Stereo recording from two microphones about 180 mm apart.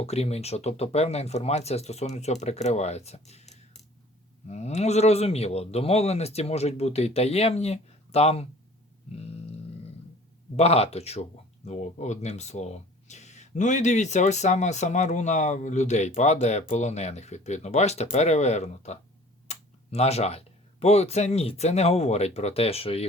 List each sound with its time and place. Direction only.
0.0 s speech: 35° left (ahead or behind)
10.6 s speech: 35° left (ahead or behind)